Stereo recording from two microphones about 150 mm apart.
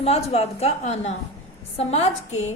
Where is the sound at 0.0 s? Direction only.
45° left (ahead or behind).